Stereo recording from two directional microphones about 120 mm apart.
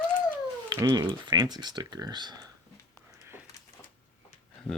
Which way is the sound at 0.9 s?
35° right (ahead or behind).